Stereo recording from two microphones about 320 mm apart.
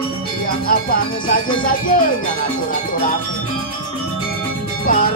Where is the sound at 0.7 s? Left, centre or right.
Left.